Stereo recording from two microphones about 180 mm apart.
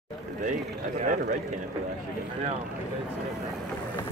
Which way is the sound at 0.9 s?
45° right (ahead or behind).